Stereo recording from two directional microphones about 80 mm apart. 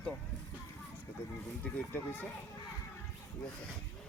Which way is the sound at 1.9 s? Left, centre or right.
Left.